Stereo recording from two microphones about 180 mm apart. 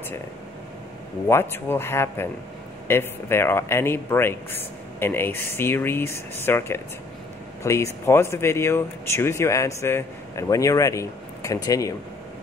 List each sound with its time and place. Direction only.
1.2 s speech: 10° left (ahead or behind)